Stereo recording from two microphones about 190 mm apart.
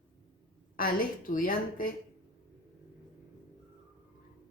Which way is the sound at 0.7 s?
50° left (ahead or behind).